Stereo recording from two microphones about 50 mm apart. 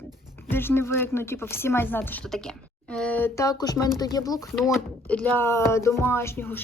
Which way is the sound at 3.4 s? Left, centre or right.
Left.